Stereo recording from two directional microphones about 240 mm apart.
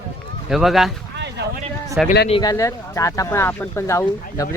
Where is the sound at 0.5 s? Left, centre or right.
Centre.